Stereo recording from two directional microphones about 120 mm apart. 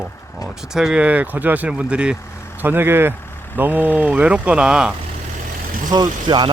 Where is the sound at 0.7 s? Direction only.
5° right (ahead or behind).